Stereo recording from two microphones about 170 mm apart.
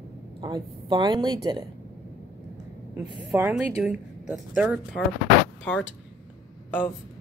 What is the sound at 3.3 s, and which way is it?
Speech, 5° right (ahead or behind).